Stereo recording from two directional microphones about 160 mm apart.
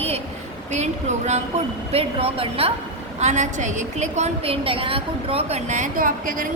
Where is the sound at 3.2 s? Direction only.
45° right (ahead or behind).